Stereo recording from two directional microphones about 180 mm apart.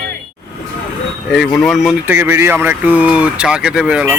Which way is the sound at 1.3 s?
Centre (ahead or behind).